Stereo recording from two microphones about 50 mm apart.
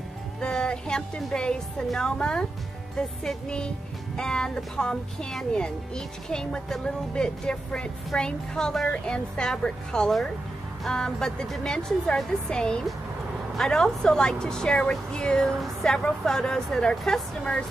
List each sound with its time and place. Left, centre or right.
0.4 s music: centre
2.0 s speech: centre